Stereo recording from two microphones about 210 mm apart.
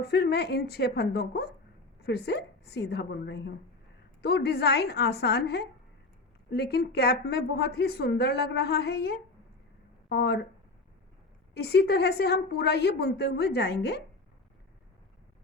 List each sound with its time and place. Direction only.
0.0 s speech: 50° left (ahead or behind)
11.5 s speech: 50° left (ahead or behind)